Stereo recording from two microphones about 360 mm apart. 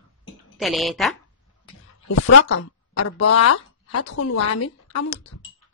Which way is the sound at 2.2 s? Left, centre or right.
Left.